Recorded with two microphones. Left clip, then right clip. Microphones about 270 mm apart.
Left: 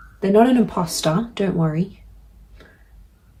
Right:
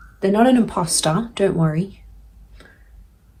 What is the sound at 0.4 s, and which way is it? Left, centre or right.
Speech, right.